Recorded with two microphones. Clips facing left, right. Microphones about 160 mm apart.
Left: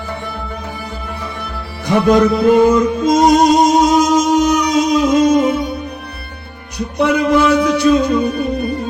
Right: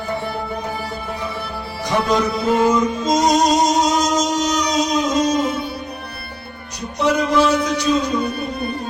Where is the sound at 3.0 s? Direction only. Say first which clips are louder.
Left 5 dB; 60° left (ahead or behind).